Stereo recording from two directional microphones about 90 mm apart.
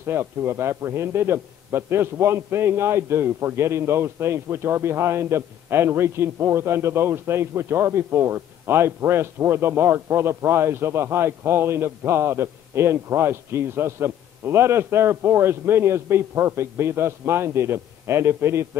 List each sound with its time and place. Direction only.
0.0 s a man's voice: 25° right (ahead or behind)